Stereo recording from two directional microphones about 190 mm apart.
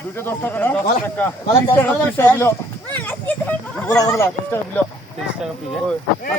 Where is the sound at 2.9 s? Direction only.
10° left (ahead or behind).